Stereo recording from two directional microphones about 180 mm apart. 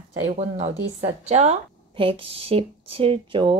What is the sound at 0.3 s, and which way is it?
A woman's voice, 35° right (ahead or behind).